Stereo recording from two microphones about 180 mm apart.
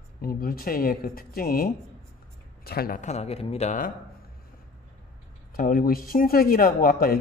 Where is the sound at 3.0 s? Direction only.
40° left (ahead or behind).